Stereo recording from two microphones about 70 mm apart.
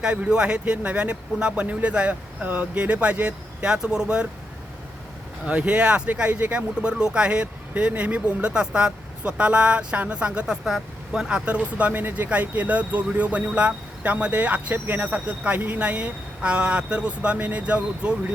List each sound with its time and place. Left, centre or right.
0.0 s speech: centre
5.5 s speech: centre